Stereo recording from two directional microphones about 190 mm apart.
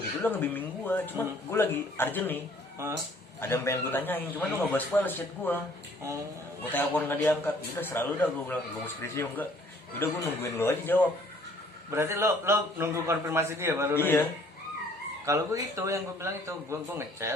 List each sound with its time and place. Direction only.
0.2 s speech: 10° left (ahead or behind)
3.4 s speech: 15° left (ahead or behind)
6.6 s speech: 10° left (ahead or behind)
11.9 s a man's voice: 15° right (ahead or behind)
13.9 s speech: 10° left (ahead or behind)
15.3 s a man's voice: 15° right (ahead or behind)